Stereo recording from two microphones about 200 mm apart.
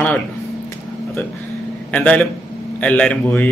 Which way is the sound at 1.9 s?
5° left (ahead or behind).